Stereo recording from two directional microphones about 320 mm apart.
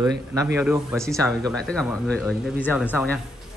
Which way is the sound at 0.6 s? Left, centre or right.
Centre.